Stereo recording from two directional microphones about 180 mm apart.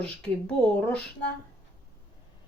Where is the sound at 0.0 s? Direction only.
5° left (ahead or behind).